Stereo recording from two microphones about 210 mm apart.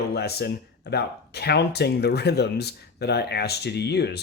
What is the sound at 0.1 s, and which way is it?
Speech, 50° left (ahead or behind).